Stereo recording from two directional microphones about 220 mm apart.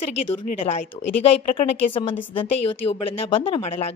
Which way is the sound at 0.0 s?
30° left (ahead or behind).